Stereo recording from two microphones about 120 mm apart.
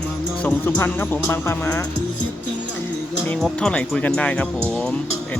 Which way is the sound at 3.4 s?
Centre (ahead or behind).